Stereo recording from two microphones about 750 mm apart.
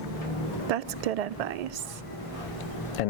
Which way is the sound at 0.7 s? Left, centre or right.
Right.